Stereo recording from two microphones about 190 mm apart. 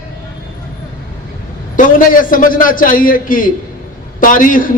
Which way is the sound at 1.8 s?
45° left (ahead or behind).